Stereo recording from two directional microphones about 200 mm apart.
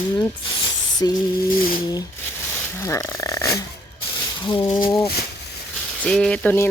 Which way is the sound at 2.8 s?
15° left (ahead or behind).